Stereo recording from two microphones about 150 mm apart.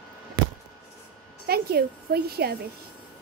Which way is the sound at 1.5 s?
90° right.